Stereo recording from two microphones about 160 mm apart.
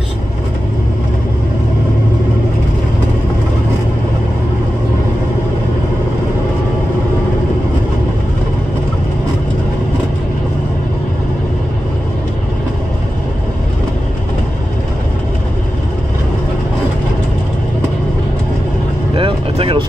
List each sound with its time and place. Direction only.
19.1 s vehicle: 35° right (ahead or behind)